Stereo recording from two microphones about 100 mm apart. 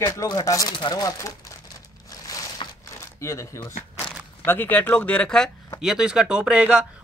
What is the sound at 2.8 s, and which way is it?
Shuffling cards, 30° left (ahead or behind).